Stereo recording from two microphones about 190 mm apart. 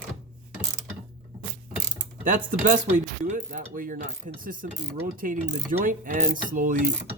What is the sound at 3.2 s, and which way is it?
Cutlery, 40° right (ahead or behind).